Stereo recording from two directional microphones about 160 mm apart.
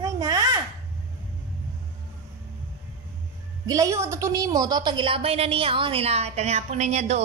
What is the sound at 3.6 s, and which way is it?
A woman's voice, 20° right (ahead or behind).